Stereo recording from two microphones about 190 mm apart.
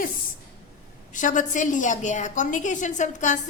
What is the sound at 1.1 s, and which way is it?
A woman's voice, 40° left (ahead or behind).